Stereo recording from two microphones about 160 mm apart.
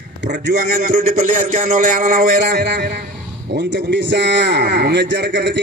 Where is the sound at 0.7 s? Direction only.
50° right (ahead or behind); by 2.7 s 75° right (ahead or behind).